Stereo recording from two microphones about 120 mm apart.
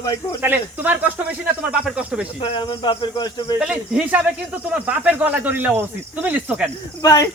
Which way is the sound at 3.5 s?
5° right (ahead or behind).